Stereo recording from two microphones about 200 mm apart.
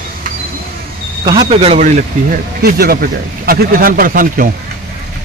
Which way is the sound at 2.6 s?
50° right (ahead or behind).